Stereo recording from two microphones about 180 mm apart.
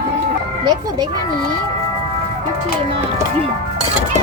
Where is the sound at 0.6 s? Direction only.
20° right (ahead or behind).